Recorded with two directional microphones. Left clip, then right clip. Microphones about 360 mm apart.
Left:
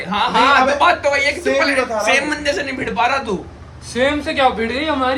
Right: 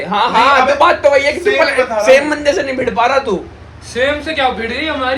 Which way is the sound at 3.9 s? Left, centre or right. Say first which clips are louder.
Right 2 dB; left.